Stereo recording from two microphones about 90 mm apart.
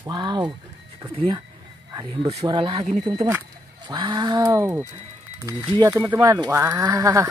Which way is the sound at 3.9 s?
60° right (ahead or behind).